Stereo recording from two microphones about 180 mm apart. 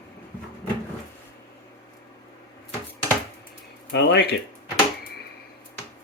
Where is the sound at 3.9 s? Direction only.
70° left (ahead or behind).